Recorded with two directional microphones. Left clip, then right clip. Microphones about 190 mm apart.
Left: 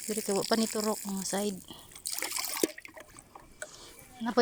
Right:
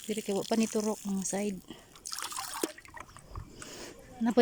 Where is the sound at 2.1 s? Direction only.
30° left (ahead or behind).